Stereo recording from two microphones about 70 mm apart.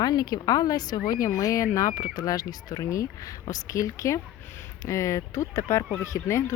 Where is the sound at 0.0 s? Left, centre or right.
Left.